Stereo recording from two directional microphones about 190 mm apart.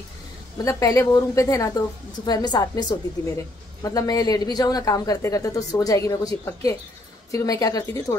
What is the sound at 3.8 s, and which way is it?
A woman's voice, 20° left (ahead or behind).